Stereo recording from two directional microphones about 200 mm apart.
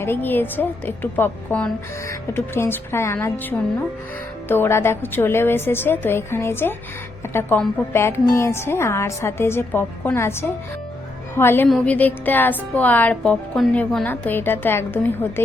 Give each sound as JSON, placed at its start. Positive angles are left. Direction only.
{"t": 0.0, "sound": "a woman's voice", "side_deg": 10}